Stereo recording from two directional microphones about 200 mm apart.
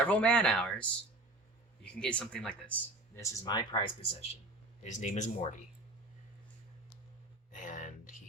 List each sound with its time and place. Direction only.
0.1 s speech: 5° left (ahead or behind)
3.2 s speech: 15° left (ahead or behind); by 5.6 s 35° left (ahead or behind)
7.5 s a sound: 40° left (ahead or behind)